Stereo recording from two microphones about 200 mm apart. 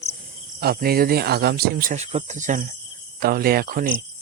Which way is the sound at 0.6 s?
50° right (ahead or behind).